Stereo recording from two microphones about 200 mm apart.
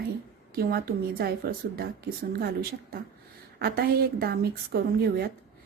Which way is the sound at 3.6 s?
50° right (ahead or behind).